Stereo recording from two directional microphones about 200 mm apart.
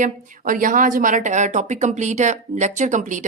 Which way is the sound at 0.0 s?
40° right (ahead or behind).